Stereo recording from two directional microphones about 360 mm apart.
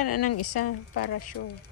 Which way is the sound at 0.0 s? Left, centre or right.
Left.